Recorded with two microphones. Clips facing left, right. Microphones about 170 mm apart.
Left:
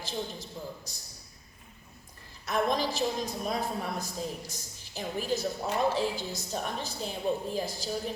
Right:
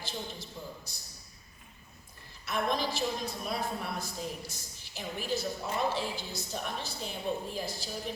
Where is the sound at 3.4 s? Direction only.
40° left (ahead or behind).